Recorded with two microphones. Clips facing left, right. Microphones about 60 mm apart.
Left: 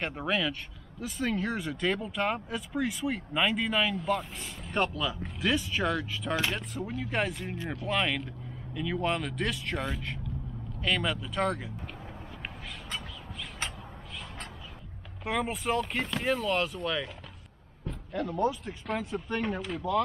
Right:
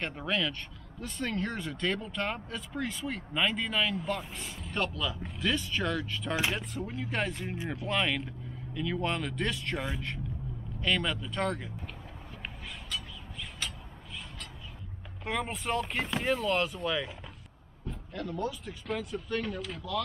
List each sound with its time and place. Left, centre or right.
0.0 s speech: centre
7.5 s speech: centre
7.8 s speech: centre
15.2 s speech: centre
18.1 s speech: centre